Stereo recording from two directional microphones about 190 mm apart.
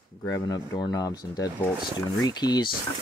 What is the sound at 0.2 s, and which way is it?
Speech, 20° left (ahead or behind).